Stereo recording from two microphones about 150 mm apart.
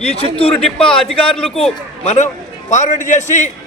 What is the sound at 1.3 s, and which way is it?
Speech, 5° left (ahead or behind).